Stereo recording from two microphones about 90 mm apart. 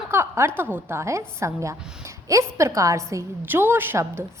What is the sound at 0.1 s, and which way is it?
A woman's voice, 30° right (ahead or behind).